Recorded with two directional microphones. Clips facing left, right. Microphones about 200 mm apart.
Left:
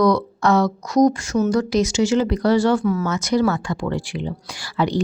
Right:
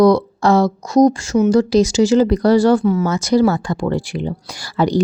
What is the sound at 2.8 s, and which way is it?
Speech, 20° right (ahead or behind).